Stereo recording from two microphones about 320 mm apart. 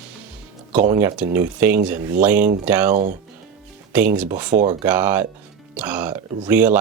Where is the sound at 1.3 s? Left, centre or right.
Centre.